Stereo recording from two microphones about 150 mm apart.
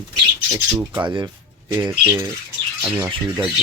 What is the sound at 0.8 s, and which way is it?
Speech, 15° right (ahead or behind).